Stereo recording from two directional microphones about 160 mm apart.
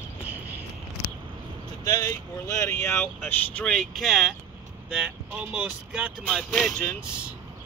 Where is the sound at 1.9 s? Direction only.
20° left (ahead or behind).